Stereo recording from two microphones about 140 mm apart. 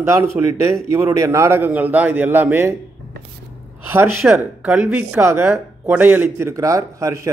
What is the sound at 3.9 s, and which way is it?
Speech, 15° right (ahead or behind).